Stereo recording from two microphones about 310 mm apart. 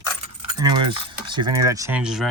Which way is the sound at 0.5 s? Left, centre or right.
Centre.